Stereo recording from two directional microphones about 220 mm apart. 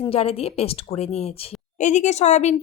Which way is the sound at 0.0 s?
25° left (ahead or behind).